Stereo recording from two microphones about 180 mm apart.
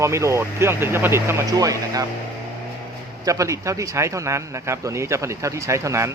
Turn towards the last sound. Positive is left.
turn(degrees=-15)  # may be behind; listen again after turning